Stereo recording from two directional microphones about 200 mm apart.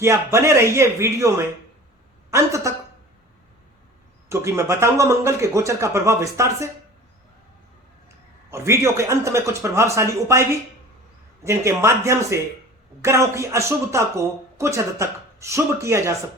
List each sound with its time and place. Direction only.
0.0 s speech: 15° right (ahead or behind)
4.3 s speech: 15° right (ahead or behind)
8.4 s speech: 15° right (ahead or behind)